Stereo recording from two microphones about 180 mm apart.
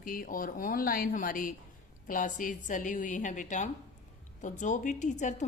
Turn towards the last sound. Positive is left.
turn(degrees=40)  # may be behind; listen again after turning